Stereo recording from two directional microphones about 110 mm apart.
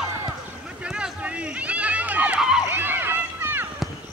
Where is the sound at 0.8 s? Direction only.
10° right (ahead or behind).